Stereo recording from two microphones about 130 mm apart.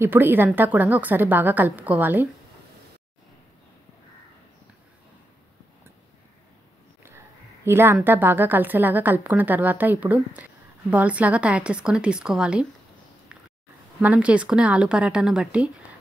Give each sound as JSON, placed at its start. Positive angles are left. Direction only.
{"t": 0.0, "sound": "a woman's voice", "side_deg": -15}
{"t": 7.6, "sound": "a woman's voice", "side_deg": -20}
{"t": 14.0, "sound": "a woman's voice", "side_deg": -10}